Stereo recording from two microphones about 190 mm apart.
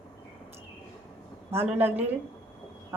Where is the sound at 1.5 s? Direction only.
10° right (ahead or behind).